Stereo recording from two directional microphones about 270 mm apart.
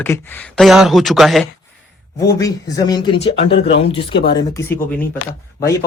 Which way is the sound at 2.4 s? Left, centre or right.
Centre.